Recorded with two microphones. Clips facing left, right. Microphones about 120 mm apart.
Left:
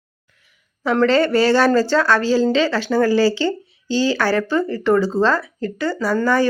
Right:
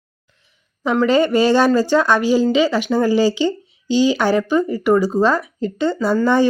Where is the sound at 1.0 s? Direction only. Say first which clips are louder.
Right 1 dB; 15° right (ahead or behind).